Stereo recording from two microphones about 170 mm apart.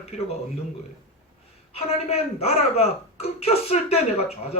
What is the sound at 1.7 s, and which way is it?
A woman's voice, 35° left (ahead or behind).